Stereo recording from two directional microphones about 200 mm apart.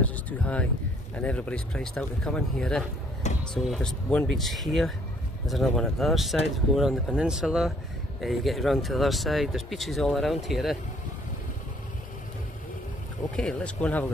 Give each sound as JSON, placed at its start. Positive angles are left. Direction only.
{"t": 0.0, "sound": "speech", "side_deg": 5}
{"t": 3.3, "sound": "speech", "side_deg": 35}
{"t": 3.6, "sound": "speech", "side_deg": 0}
{"t": 13.4, "sound": "speech", "side_deg": 5}